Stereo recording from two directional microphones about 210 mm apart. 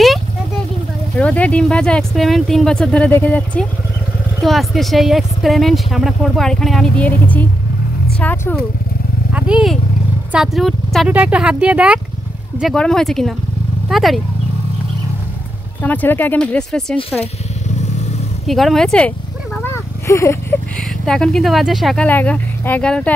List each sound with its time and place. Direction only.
1.1 s speech: 5° left (ahead or behind)
9.3 s vehicle: 5° right (ahead or behind)
10.3 s speech: centre (ahead or behind)
15.8 s speech: 10° left (ahead or behind)
17.7 s vehicle: 30° left (ahead or behind)
18.5 s speech: centre (ahead or behind)